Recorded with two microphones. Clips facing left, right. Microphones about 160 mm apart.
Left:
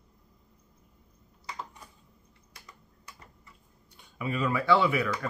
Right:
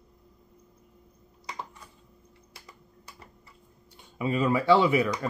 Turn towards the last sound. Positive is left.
turn(degrees=-20)  # may be behind; listen again after turning